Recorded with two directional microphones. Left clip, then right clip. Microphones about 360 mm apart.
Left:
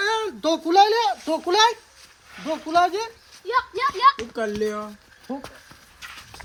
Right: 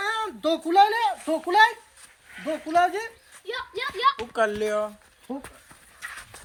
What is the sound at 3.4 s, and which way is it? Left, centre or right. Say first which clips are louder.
Speech: left 9 dB; left.